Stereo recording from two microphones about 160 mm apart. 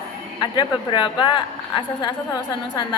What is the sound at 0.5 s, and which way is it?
A woman's voice, 30° left (ahead or behind).